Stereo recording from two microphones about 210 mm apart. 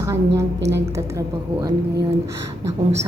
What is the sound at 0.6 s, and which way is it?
Speech, 55° right (ahead or behind).